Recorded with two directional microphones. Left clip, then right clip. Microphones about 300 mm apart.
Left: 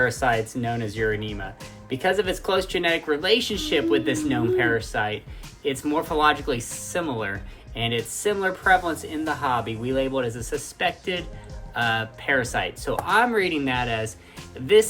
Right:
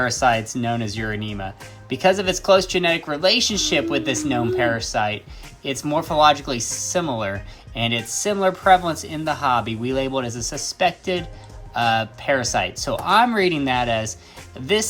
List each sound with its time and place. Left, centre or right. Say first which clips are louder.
0.0 s speech: right 3 dB; right